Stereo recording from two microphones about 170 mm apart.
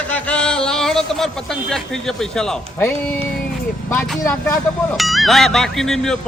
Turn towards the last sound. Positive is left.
turn(degrees=5)  # may be behind; listen again after turning